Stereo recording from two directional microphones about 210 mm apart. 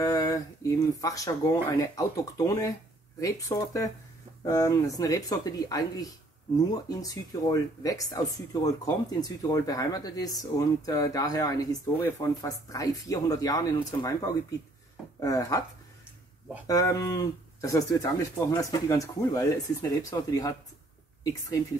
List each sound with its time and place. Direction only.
0.0 s speech: 15° left (ahead or behind)
16.6 s speech: 15° left (ahead or behind)